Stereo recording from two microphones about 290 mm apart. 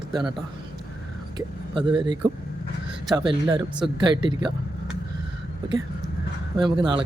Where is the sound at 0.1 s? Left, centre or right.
Centre.